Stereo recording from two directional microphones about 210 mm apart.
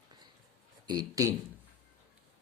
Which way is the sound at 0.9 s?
20° right (ahead or behind).